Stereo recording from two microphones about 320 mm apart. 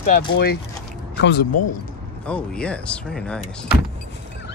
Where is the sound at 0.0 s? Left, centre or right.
Left.